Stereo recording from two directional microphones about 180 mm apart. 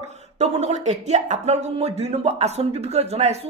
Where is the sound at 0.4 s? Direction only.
40° right (ahead or behind).